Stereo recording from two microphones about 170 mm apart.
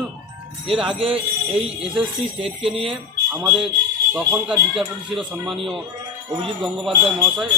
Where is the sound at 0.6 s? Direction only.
5° right (ahead or behind).